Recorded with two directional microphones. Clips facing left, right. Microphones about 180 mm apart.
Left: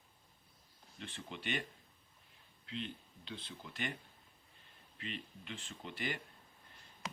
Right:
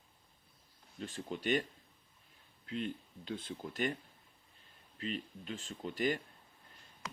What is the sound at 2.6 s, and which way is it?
Speech, 45° right (ahead or behind).